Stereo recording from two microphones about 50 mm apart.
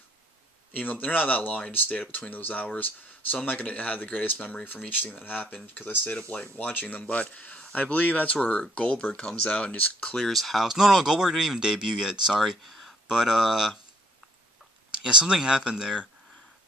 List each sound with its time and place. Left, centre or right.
0.7 s speech: left
4.6 s speech: left
10.1 s speech: centre
12.4 s speech: centre
13.1 s speech: centre
14.9 s a sound: centre
15.3 s speech: centre